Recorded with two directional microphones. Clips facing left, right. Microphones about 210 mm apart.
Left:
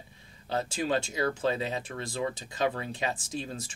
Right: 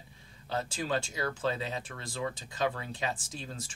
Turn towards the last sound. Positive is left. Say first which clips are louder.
# left 6 dB
turn(degrees=20)  # may be behind; listen again after turning